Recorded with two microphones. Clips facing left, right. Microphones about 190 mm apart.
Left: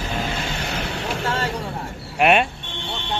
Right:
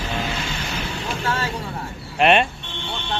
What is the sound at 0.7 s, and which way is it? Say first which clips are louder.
Vehicle: left 2 dB; 65° left (ahead or behind).